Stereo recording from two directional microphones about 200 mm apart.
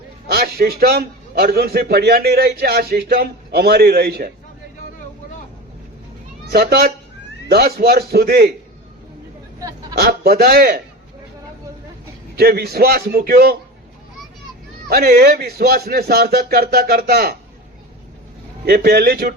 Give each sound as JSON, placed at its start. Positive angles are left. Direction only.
{"t": 0.3, "sound": "a man's voice", "side_deg": -50}
{"t": 6.5, "sound": "a man's voice", "side_deg": -50}
{"t": 9.9, "sound": "a man's voice", "side_deg": -50}
{"t": 12.4, "sound": "a man's voice", "side_deg": -50}
{"t": 14.8, "sound": "a man's voice", "side_deg": -50}
{"t": 18.6, "sound": "a man's voice", "side_deg": -50}